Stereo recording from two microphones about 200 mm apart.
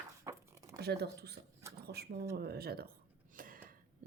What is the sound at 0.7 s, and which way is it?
Speech, 55° right (ahead or behind).